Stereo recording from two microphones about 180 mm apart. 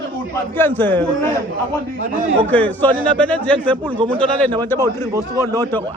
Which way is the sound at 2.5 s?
10° left (ahead or behind).